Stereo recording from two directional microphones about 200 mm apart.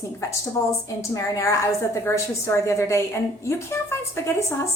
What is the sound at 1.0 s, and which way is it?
Speech, 15° left (ahead or behind).